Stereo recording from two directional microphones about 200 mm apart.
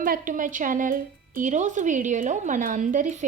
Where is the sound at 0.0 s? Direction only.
45° right (ahead or behind).